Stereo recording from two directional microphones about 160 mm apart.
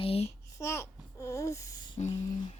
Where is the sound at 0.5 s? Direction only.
20° left (ahead or behind).